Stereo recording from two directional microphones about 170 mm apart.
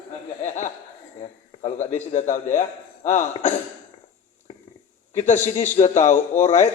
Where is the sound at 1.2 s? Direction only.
40° left (ahead or behind).